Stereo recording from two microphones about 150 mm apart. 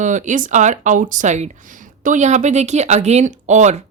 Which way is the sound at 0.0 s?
55° right (ahead or behind).